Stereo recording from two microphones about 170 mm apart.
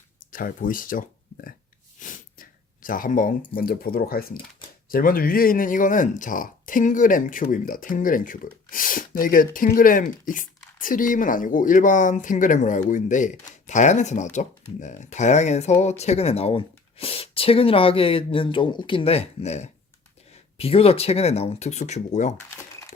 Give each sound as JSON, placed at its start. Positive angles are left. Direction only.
{"t": 0.3, "sound": "speech", "side_deg": 55}
{"t": 2.0, "sound": "snort", "side_deg": 50}
{"t": 3.4, "sound": "speech", "side_deg": 60}
{"t": 22.4, "sound": "a sound", "side_deg": 20}